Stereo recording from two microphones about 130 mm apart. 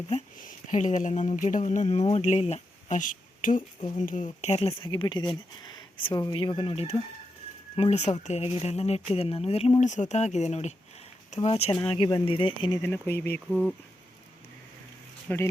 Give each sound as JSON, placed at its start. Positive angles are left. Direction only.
{"t": 0.3, "sound": "speech", "side_deg": 80}
{"t": 3.0, "sound": "speech", "side_deg": 90}
{"t": 4.9, "sound": "speech", "side_deg": 35}
{"t": 7.8, "sound": "speech", "side_deg": 60}
{"t": 11.7, "sound": "speech", "side_deg": 40}
{"t": 12.7, "sound": "speech", "side_deg": 20}
{"t": 15.3, "sound": "speech", "side_deg": 15}